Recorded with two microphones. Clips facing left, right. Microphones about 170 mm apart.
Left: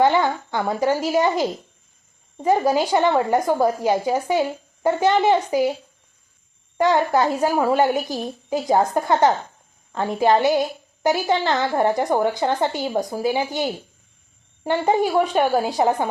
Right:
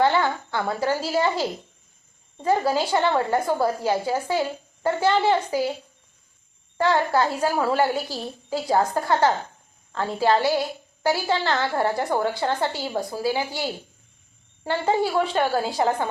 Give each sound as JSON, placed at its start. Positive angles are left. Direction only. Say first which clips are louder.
{"t": 0.0, "sound": "a woman's voice", "louder": "left 3 dB", "side_deg": 15}
{"t": 6.7, "sound": "a woman's voice", "louder": "left 3 dB", "side_deg": 15}